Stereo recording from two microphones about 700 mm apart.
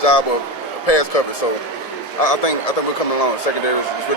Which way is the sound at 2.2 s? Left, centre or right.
Left.